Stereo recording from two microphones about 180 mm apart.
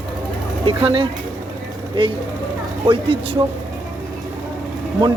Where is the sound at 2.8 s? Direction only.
30° right (ahead or behind).